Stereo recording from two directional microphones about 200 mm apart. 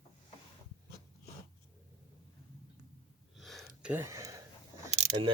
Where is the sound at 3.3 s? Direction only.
Centre (ahead or behind).